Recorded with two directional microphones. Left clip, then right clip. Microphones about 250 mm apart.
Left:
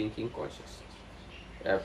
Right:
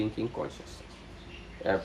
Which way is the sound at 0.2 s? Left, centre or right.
Centre.